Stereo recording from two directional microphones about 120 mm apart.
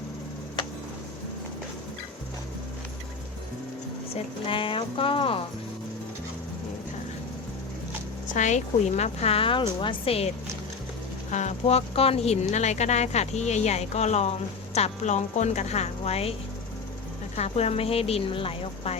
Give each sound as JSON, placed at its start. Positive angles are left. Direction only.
{"t": 4.1, "sound": "a woman's voice", "side_deg": 45}
{"t": 8.3, "sound": "a woman's voice", "side_deg": 90}
{"t": 11.3, "sound": "speech", "side_deg": 80}
{"t": 14.8, "sound": "a woman's voice", "side_deg": 80}
{"t": 17.3, "sound": "a woman's voice", "side_deg": 65}